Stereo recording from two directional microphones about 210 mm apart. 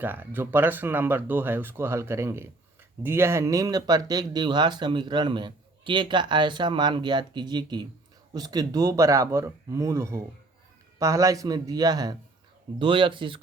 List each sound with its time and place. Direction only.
0.0 s speech: 10° right (ahead or behind)